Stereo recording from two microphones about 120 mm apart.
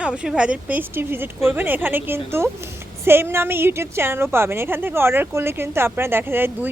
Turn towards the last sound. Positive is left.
turn(degrees=-20)  # may be behind; listen again after turning